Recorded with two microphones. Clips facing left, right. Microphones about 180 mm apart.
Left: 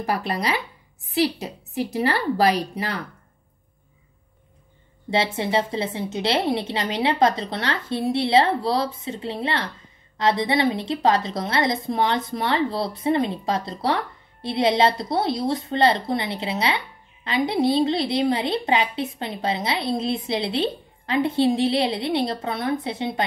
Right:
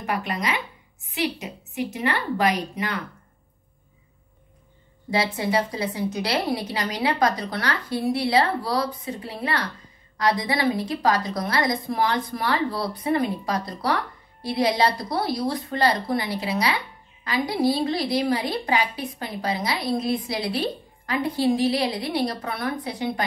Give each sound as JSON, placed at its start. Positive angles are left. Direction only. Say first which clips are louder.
{"t": 0.0, "sound": "a woman's voice", "louder": "left 2 dB", "side_deg": 35}
{"t": 5.1, "sound": "a woman's voice", "louder": "left 1 dB", "side_deg": 25}